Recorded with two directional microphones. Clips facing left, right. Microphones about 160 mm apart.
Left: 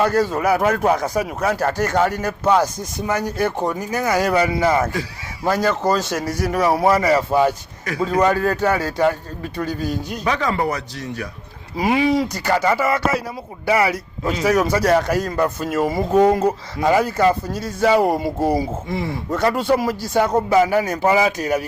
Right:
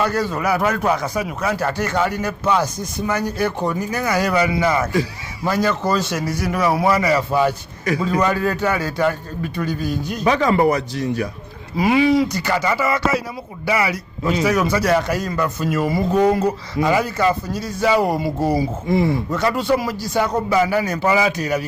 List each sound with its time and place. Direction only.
0.0 s a man's voice: 45° left (ahead or behind)
10.3 s speech: 15° right (ahead or behind)
11.8 s speech: 45° left (ahead or behind)